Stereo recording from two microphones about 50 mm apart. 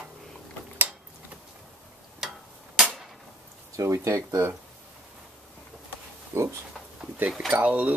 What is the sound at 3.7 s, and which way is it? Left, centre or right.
Speech, right.